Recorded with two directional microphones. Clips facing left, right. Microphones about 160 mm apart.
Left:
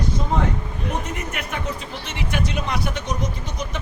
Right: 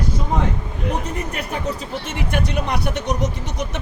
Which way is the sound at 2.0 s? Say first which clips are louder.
Right 2 dB; 50° right (ahead or behind).